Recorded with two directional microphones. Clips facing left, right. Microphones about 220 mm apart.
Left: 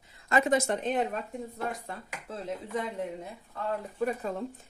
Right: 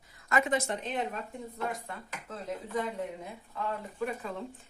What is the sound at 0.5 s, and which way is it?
Speech, 45° left (ahead or behind).